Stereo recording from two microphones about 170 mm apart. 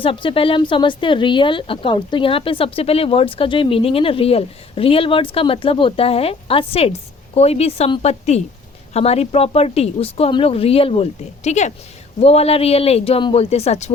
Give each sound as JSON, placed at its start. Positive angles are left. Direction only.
{"t": 0.0, "sound": "a woman's voice", "side_deg": 30}